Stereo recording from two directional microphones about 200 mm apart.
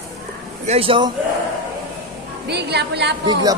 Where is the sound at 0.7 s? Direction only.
25° right (ahead or behind).